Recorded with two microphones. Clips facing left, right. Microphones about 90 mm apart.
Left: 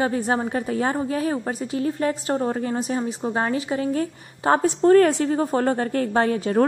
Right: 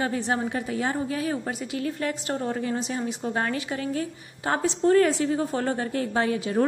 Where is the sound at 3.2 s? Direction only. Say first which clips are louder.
Left 4 dB; 25° left (ahead or behind).